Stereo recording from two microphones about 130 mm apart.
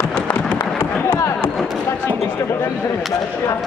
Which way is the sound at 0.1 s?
15° left (ahead or behind).